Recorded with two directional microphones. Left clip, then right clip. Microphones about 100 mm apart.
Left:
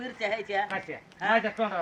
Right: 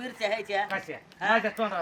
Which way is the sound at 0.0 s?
15° right (ahead or behind).